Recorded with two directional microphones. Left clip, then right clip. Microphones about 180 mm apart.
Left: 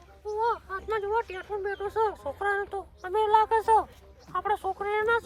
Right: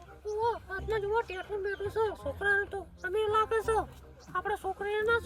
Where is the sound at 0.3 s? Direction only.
Centre (ahead or behind).